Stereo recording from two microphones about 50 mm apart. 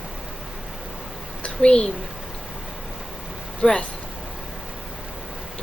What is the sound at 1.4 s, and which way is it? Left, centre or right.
Speech, centre.